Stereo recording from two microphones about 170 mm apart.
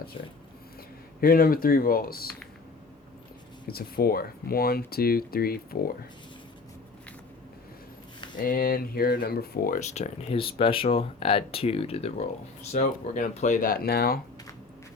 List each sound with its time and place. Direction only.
1.2 s speech: 60° left (ahead or behind)
3.7 s speech: 65° left (ahead or behind)
8.4 s speech: 55° left (ahead or behind)
9.9 s speech: 40° left (ahead or behind)
12.7 s speech: 45° left (ahead or behind); by 14.2 s 65° left (ahead or behind)